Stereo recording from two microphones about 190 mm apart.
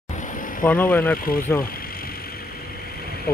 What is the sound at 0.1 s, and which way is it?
Vehicle, 40° left (ahead or behind).